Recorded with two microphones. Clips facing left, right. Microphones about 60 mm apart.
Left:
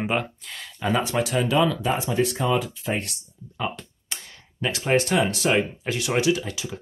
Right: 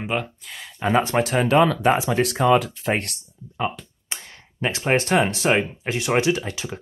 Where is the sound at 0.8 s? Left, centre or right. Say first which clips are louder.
Right 4 dB; right.